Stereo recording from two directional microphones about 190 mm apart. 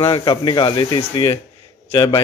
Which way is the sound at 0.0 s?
25° left (ahead or behind).